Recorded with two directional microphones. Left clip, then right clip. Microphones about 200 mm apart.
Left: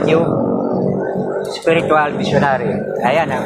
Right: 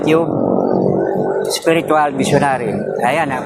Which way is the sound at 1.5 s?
75° right (ahead or behind).